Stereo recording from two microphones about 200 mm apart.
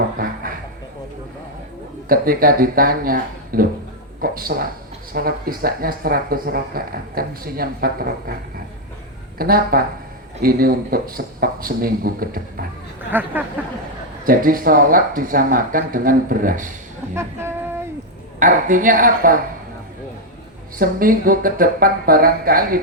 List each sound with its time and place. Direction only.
0.2 s a sound: 45° right (ahead or behind)
2.0 s speech: 45° right (ahead or behind)
9.4 s speech: 50° right (ahead or behind)
13.1 s a sound: 10° right (ahead or behind)
14.3 s speech: 45° right (ahead or behind)
18.3 s speech: 40° right (ahead or behind)
20.7 s speech: 45° right (ahead or behind)